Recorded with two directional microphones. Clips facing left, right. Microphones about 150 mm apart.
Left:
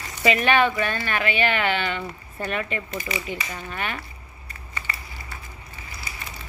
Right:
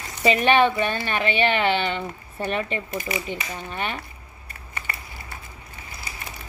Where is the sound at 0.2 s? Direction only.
25° right (ahead or behind).